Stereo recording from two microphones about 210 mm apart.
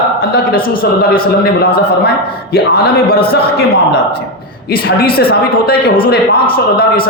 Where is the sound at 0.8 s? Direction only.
45° left (ahead or behind).